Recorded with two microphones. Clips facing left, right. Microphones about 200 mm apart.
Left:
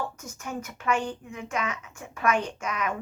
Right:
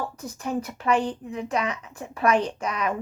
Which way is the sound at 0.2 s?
35° right (ahead or behind).